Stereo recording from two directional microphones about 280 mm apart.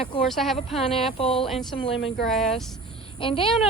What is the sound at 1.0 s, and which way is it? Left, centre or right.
Speech, centre.